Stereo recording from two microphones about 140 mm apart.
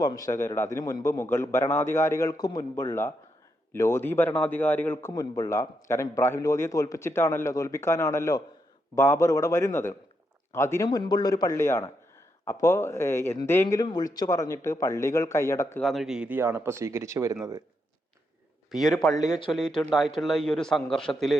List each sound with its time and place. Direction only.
0.0 s a man's voice: 25° left (ahead or behind)
10.8 s a man's voice: 30° left (ahead or behind)
15.8 s speech: centre (ahead or behind); by 17.3 s 20° right (ahead or behind)
18.7 s a man's voice: 5° right (ahead or behind)